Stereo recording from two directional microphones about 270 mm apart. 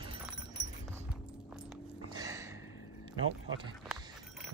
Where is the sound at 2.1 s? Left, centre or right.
Centre.